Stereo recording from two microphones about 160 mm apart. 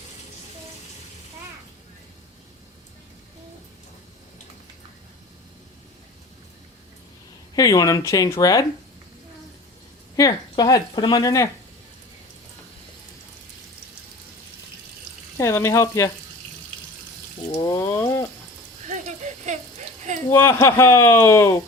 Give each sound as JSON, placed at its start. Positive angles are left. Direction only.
{"t": 7.5, "sound": "speech", "side_deg": 20}
{"t": 10.5, "sound": "speech", "side_deg": 25}
{"t": 15.4, "sound": "speech", "side_deg": 20}
{"t": 17.5, "sound": "a sound", "side_deg": 25}
{"t": 20.3, "sound": "a man's voice", "side_deg": 15}